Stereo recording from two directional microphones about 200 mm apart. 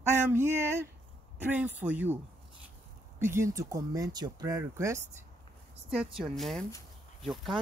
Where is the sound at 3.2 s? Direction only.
15° right (ahead or behind).